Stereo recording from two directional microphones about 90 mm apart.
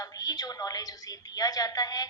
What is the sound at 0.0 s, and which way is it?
A woman's voice, 45° left (ahead or behind).